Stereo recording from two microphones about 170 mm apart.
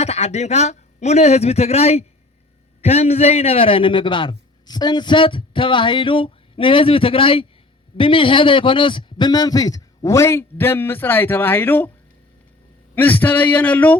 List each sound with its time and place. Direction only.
0.0 s a man's voice: 40° left (ahead or behind); by 11.9 s 10° left (ahead or behind)
13.0 s speech: 10° left (ahead or behind)